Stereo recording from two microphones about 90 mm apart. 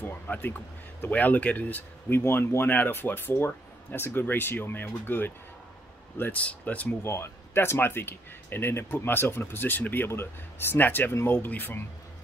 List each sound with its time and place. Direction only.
0.0 s speech: 20° left (ahead or behind)
7.1 s speech: 30° left (ahead or behind)